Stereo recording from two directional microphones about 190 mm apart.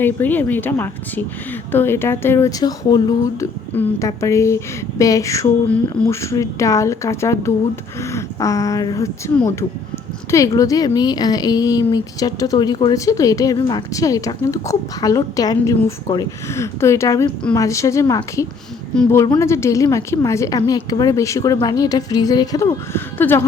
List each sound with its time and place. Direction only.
0.0 s a woman's voice: 10° left (ahead or behind)